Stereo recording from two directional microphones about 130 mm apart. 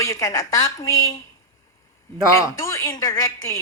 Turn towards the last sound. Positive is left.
turn(degrees=30)  # may be behind; listen again after turning